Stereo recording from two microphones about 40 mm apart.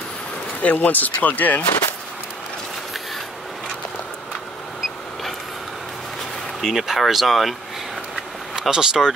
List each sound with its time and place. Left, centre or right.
0.6 s speech: left
6.7 s speech: centre
8.5 s speech: centre